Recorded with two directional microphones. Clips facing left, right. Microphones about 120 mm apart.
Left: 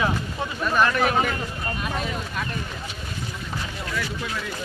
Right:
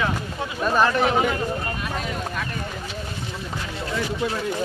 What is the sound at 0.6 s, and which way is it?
Speech, 30° right (ahead or behind).